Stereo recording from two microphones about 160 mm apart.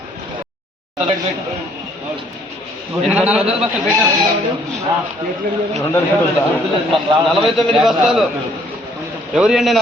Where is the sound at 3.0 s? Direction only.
10° right (ahead or behind).